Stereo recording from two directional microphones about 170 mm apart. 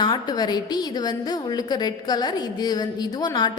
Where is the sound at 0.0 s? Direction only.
25° left (ahead or behind).